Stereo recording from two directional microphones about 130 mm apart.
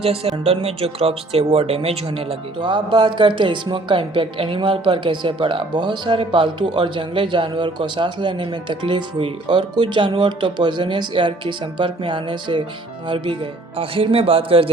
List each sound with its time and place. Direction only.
0.0 s speech: 50° right (ahead or behind)